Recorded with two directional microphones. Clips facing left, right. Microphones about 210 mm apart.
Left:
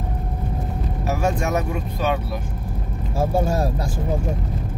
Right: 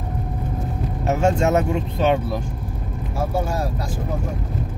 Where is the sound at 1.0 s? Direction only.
25° right (ahead or behind).